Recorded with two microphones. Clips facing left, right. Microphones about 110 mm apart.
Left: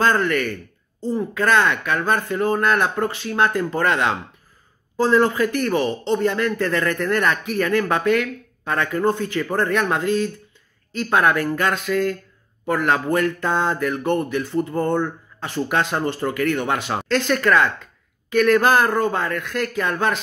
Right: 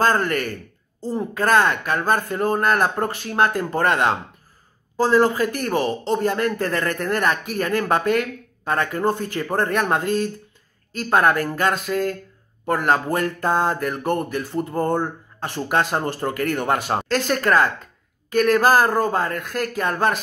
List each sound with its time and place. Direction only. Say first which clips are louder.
0.0 s speech: left 1 dB; 40° right (ahead or behind)